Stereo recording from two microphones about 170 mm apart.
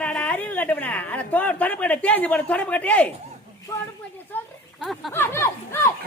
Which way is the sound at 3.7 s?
20° left (ahead or behind).